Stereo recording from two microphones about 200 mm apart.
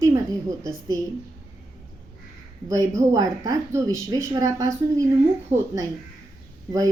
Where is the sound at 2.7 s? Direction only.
15° right (ahead or behind).